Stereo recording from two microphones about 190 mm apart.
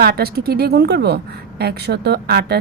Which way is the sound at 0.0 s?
55° right (ahead or behind).